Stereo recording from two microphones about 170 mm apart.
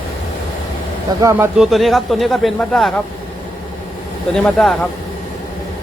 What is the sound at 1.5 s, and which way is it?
Speech, centre (ahead or behind).